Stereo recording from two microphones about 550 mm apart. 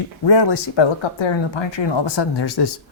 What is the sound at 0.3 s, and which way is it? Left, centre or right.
Speech, left.